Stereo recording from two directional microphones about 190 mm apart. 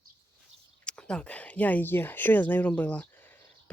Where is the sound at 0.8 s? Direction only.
5° left (ahead or behind).